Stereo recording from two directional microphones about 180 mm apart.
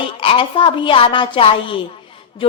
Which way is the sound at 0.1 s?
30° left (ahead or behind).